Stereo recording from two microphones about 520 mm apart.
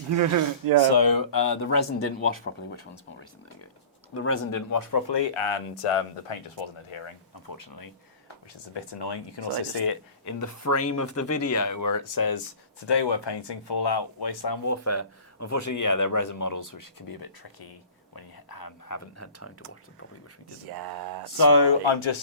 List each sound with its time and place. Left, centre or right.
0.1 s speech: right
0.9 s speech: left
4.1 s speech: left
7.4 s speech: left
8.7 s speech: left
10.2 s speech: left
12.9 s speech: left
18.1 s whispering: left
20.7 s speech: right
21.3 s speech: left